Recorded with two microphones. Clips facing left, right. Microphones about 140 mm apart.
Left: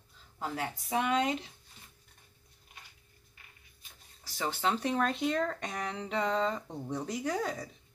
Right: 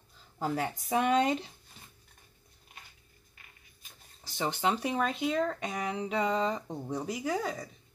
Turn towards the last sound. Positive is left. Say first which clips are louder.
# right 1 dB
turn(degrees=0)  # may be behind; listen again after turning